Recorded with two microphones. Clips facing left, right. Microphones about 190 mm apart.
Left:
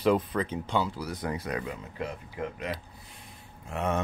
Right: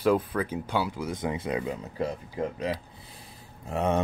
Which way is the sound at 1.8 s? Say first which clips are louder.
Right 5 dB; 35° right (ahead or behind).